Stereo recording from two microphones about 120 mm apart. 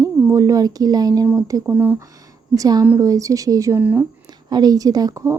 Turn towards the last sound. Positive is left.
turn(degrees=-30)  # may be behind; listen again after turning